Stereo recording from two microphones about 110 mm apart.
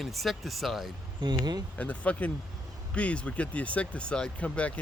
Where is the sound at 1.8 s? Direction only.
10° left (ahead or behind).